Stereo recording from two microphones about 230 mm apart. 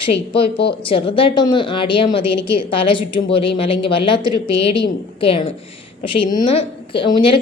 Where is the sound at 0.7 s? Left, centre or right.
Left.